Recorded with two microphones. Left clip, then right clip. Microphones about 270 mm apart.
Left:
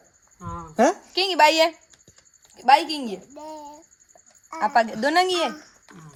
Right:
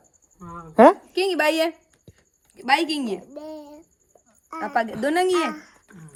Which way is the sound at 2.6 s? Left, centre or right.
Centre.